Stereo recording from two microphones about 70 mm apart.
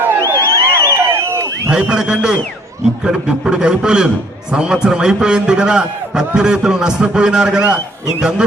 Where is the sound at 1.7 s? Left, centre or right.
Centre.